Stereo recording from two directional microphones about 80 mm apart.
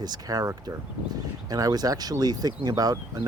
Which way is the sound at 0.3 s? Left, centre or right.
Right.